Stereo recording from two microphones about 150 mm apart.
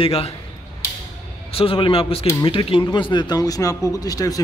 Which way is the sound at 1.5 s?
40° left (ahead or behind).